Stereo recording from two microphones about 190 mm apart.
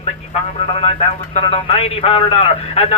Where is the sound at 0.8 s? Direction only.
30° left (ahead or behind).